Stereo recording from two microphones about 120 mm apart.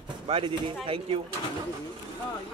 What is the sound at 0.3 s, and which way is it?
Speech, 50° right (ahead or behind).